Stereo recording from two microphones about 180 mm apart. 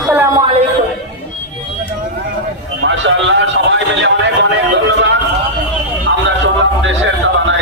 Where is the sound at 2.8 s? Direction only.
90° right.